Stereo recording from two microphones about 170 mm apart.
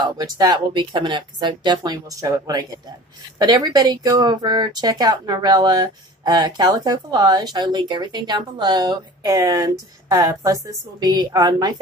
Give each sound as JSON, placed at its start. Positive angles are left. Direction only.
{"t": 0.0, "sound": "speech", "side_deg": -25}